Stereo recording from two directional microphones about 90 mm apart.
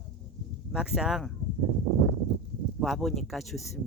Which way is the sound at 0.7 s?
5° right (ahead or behind).